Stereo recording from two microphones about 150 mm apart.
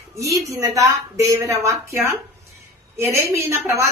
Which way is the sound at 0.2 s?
20° right (ahead or behind).